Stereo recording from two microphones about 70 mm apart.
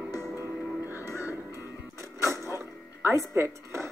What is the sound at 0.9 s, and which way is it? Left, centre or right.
Music, right.